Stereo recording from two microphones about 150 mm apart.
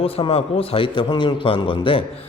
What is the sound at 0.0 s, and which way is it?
A man's voice, 40° left (ahead or behind).